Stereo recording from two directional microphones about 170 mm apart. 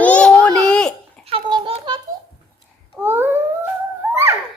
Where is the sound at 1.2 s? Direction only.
35° right (ahead or behind).